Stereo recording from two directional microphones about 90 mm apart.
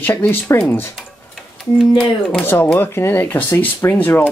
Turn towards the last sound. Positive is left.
turn(degrees=20)  # may be behind; listen again after turning